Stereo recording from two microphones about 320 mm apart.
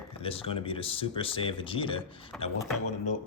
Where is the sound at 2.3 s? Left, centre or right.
Centre.